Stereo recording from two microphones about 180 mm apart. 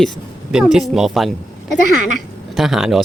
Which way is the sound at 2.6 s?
Centre (ahead or behind).